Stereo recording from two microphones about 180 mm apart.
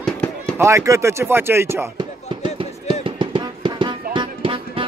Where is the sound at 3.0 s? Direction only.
25° right (ahead or behind).